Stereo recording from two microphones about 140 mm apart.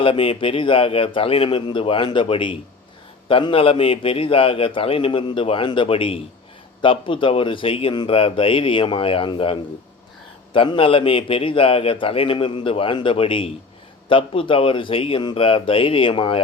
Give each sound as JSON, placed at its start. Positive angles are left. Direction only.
{"t": 0.0, "sound": "a man's voice", "side_deg": 40}